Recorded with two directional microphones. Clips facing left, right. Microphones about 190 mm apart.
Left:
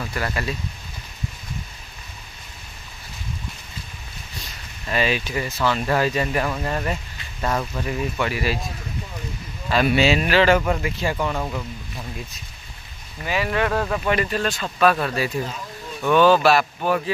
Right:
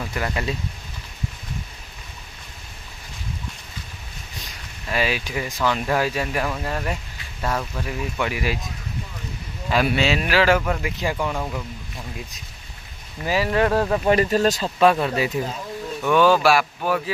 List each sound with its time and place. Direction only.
0.1 s speech: 15° right (ahead or behind)
4.8 s speech: 5° right (ahead or behind)
8.2 s speech: 15° right (ahead or behind)
9.8 s speech: centre (ahead or behind)
11.1 s speech: centre (ahead or behind)
13.2 s speech: 35° right (ahead or behind)
14.8 s speech: 20° right (ahead or behind)